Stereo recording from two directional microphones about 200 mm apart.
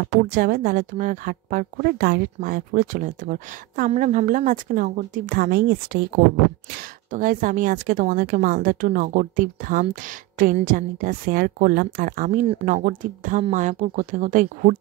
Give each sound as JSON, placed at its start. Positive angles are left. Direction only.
{"t": 0.3, "sound": "a woman's voice", "side_deg": -45}
{"t": 7.1, "sound": "a woman's voice", "side_deg": -40}